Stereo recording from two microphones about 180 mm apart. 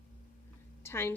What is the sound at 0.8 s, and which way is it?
Speech, 15° left (ahead or behind).